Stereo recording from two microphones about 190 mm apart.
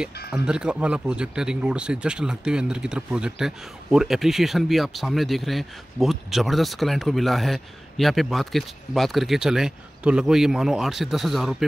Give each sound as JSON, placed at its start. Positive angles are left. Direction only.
{"t": 0.3, "sound": "speech", "side_deg": -5}